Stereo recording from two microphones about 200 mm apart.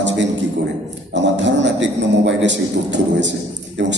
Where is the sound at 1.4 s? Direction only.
65° right (ahead or behind).